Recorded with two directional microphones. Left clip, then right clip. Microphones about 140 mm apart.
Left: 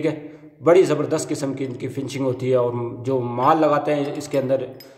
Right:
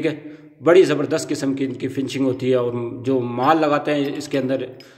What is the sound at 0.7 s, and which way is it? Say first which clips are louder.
A man's voice: right 1 dB; 15° right (ahead or behind).